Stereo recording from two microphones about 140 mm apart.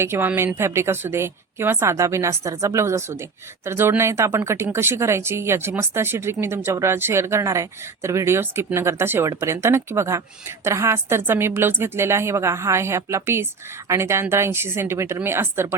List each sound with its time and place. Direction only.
0.0 s speech: 15° right (ahead or behind)